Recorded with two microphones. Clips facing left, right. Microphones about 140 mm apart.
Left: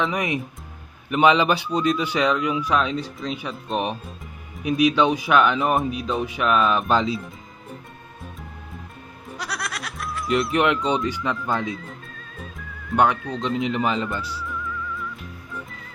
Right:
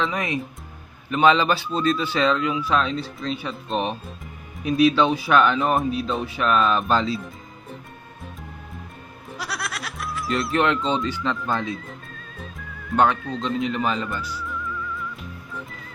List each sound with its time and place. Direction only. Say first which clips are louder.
0.0 s speech: left 1 dB; 15° left (ahead or behind)
9.4 s music: even; centre (ahead or behind)
10.5 s speech: right 2 dB; 15° left (ahead or behind)
12.4 s music: even; centre (ahead or behind)
13.3 s speech: left 1 dB; 20° left (ahead or behind)
14.4 s music: even; centre (ahead or behind)